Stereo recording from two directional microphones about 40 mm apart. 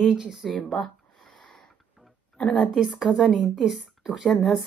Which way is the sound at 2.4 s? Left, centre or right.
Left.